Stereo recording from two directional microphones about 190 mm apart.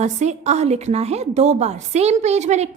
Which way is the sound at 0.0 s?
35° right (ahead or behind).